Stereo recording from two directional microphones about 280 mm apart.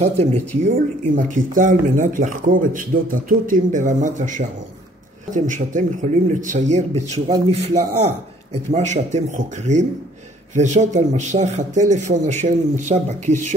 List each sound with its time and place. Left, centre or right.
0.0 s a man's voice: right